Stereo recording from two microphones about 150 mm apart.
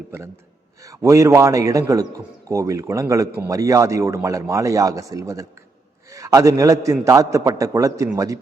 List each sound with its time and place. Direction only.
0.8 s a man's voice: 20° right (ahead or behind)